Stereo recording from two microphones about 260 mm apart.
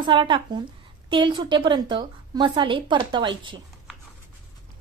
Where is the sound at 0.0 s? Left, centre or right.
Centre.